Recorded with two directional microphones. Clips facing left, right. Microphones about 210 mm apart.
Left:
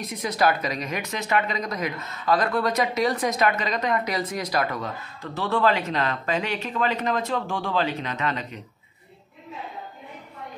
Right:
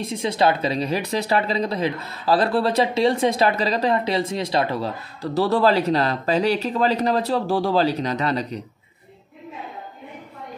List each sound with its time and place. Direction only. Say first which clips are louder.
0.0 s speech: right 3 dB; 25° right (ahead or behind)